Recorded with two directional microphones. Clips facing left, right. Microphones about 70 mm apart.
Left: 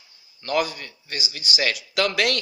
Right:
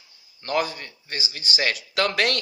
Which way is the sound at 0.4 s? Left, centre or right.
Right.